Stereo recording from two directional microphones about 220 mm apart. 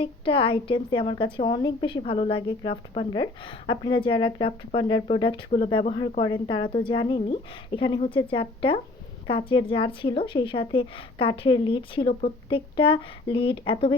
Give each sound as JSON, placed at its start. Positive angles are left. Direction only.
{"t": 0.0, "sound": "speech", "side_deg": 25}